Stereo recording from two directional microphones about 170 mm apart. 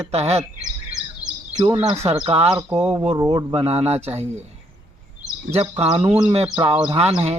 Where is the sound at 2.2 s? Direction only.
35° right (ahead or behind).